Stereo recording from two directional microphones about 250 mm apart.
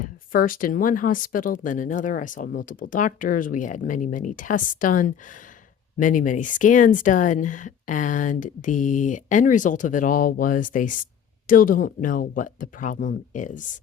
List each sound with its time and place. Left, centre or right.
0.3 s speech: left